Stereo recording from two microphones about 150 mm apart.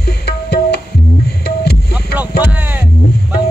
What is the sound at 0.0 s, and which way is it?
Music, 90° left.